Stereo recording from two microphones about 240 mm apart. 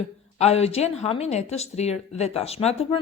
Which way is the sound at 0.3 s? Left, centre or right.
Left.